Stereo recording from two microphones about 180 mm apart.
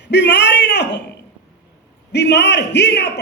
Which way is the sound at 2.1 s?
70° left (ahead or behind).